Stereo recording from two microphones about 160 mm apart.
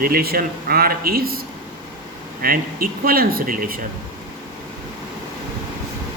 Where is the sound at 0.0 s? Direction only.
70° right (ahead or behind).